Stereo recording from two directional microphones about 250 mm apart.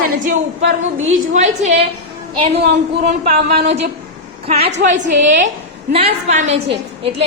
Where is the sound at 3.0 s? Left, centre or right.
Right.